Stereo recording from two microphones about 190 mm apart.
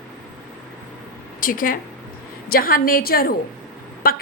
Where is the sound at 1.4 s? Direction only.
45° left (ahead or behind).